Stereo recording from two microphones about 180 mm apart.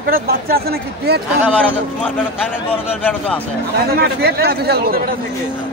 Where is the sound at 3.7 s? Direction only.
60° right (ahead or behind).